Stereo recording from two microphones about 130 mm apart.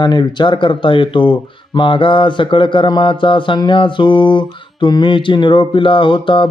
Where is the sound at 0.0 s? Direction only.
35° left (ahead or behind).